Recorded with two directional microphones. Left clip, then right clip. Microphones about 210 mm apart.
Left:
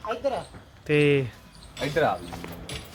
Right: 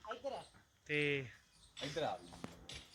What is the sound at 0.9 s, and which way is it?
Speech, 25° left (ahead or behind).